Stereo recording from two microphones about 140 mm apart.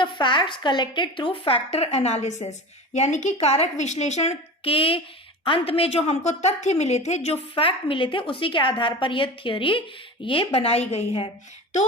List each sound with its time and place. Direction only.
0.0 s a woman's voice: 35° left (ahead or behind)